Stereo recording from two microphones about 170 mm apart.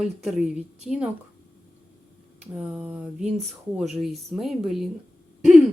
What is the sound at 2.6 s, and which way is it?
Speech, 5° right (ahead or behind).